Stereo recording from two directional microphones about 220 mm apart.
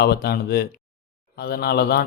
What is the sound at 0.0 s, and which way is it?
A man's voice, 45° left (ahead or behind).